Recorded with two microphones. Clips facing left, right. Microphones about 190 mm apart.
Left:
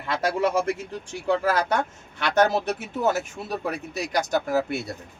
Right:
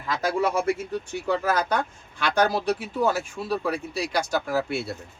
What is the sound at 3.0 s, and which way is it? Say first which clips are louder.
Speech: left 3 dB; 20° left (ahead or behind).